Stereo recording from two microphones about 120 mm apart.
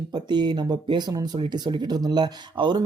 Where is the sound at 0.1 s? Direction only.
35° right (ahead or behind).